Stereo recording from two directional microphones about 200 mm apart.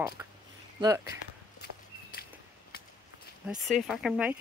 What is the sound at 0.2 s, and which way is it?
Speech, 10° right (ahead or behind).